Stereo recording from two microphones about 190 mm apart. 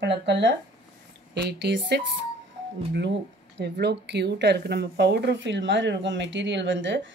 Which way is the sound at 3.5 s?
60° right (ahead or behind).